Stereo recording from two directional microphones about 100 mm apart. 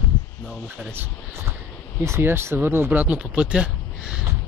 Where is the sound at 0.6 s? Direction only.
20° right (ahead or behind).